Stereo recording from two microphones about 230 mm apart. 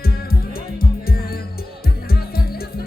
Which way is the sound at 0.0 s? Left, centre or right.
Left.